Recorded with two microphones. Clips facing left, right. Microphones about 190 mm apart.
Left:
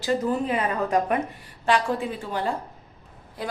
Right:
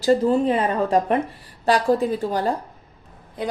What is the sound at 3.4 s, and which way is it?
Speech, 20° right (ahead or behind).